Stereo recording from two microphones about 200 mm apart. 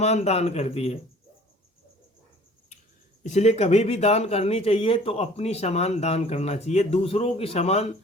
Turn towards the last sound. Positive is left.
turn(degrees=30)  # may be behind; listen again after turning